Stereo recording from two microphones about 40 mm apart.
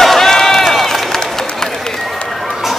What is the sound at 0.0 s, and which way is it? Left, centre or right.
Run, centre.